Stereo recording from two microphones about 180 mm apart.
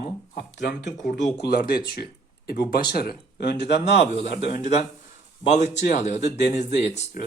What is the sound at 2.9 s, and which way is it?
Speech, 60° left (ahead or behind).